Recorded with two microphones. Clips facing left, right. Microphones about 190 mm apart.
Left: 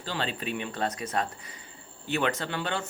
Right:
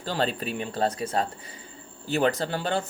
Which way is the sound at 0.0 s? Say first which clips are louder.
Right 5 dB; 40° right (ahead or behind).